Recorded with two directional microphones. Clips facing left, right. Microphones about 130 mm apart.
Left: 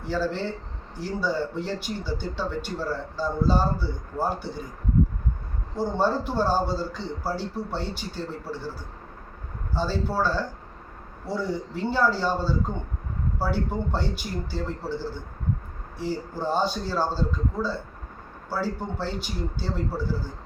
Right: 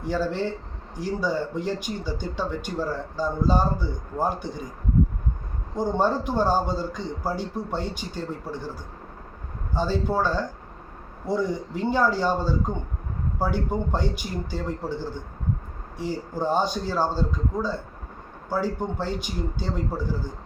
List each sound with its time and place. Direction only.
0.0 s speech: 15° right (ahead or behind)
5.7 s speech: 15° right (ahead or behind)
9.7 s speech: 15° right (ahead or behind)